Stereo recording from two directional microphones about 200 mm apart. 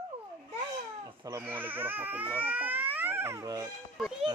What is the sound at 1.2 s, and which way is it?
Speech, 15° right (ahead or behind).